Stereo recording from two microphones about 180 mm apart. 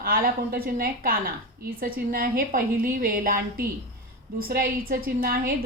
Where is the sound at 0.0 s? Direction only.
55° right (ahead or behind).